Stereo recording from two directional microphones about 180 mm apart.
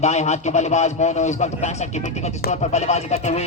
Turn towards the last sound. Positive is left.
turn(degrees=40)  # may be behind; listen again after turning